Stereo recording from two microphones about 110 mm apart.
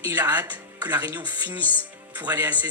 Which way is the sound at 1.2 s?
40° right (ahead or behind).